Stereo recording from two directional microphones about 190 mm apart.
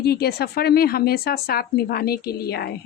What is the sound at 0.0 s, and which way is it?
Speech, 55° left (ahead or behind).